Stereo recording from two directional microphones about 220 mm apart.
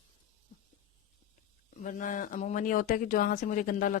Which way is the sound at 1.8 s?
35° left (ahead or behind).